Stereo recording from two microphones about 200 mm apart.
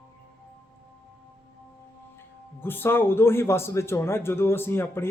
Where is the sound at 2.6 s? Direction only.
10° left (ahead or behind).